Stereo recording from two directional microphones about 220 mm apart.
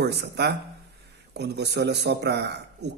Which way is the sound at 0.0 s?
50° right (ahead or behind).